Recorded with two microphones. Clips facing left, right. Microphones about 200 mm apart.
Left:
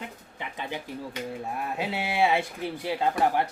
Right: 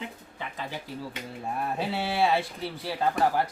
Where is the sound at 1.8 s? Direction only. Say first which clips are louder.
Left 1 dB; 15° left (ahead or behind).